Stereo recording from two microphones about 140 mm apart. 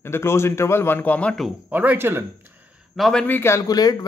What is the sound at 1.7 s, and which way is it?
Speech, 10° right (ahead or behind).